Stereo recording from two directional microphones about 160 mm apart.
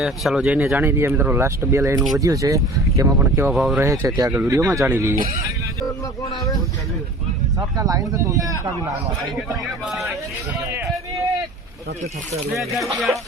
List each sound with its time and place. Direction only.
0.0 s speech: centre (ahead or behind)
3.5 s speech: centre (ahead or behind)
3.8 s speech: 15° right (ahead or behind)
7.8 s speech: 20° right (ahead or behind)
9.8 s speech: centre (ahead or behind)
10.7 s a sound: 20° right (ahead or behind)